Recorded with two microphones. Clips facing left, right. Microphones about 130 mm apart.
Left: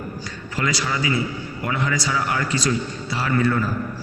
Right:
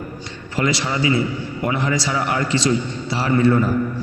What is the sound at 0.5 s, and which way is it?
A man's voice, 25° right (ahead or behind).